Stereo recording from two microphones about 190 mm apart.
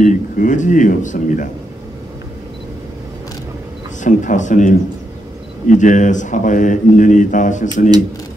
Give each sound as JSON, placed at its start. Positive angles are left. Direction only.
{"t": 0.0, "sound": "speech", "side_deg": 40}
{"t": 4.0, "sound": "speech", "side_deg": 40}